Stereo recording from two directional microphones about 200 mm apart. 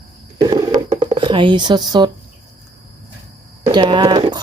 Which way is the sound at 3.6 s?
25° right (ahead or behind).